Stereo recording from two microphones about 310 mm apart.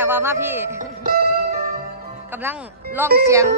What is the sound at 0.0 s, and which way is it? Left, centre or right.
Speech, centre.